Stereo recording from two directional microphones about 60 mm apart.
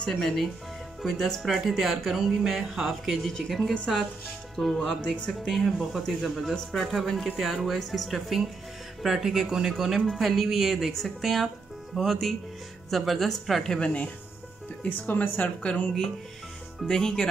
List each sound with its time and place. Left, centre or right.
0.0 s speech: centre
13.7 s speech: centre
14.8 s speech: left; by 17.3 s centre